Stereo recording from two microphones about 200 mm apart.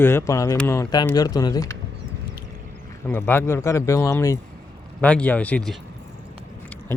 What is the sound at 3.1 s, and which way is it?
Speech, 10° left (ahead or behind).